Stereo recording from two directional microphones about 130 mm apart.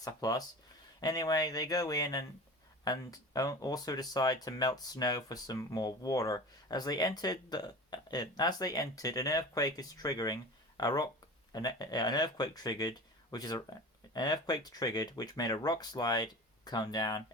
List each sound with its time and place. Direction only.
0.0 s speech: 30° left (ahead or behind)